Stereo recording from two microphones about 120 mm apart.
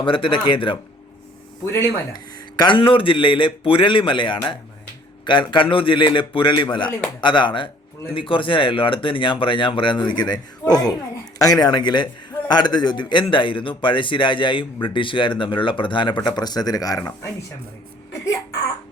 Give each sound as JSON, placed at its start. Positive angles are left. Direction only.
{"t": 0.0, "sound": "speech", "side_deg": 45}
{"t": 2.1, "sound": "a man's voice", "side_deg": 40}